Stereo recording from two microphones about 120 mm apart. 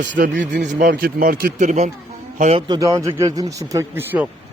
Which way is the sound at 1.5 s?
80° right.